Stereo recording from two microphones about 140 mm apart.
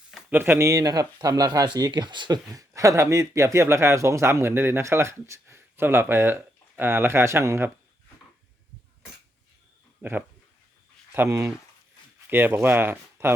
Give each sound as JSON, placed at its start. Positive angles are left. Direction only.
{"t": 0.3, "sound": "speech", "side_deg": -15}
{"t": 10.0, "sound": "speech", "side_deg": -15}